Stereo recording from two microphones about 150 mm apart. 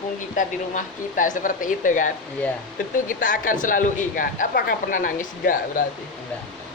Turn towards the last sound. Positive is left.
turn(degrees=65)  # may be behind; listen again after turning